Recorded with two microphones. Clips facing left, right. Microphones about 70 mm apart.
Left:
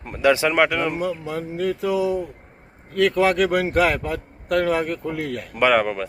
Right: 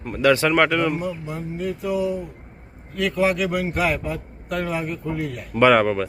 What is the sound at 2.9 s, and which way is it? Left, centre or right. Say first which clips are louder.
A man's voice: left 3 dB; left.